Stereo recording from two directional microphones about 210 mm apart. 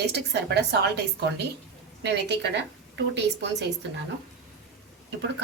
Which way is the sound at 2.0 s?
55° right (ahead or behind).